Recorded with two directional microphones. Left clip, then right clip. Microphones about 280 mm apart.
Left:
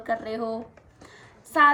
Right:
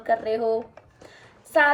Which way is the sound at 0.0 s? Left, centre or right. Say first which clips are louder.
Right 5 dB; centre.